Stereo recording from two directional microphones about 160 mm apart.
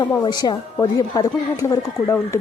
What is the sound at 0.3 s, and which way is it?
Speech, 25° left (ahead or behind).